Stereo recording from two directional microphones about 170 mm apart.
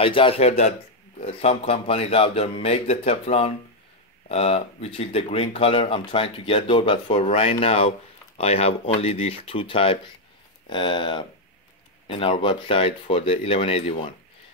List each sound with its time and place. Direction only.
0.0 s speech: 30° left (ahead or behind)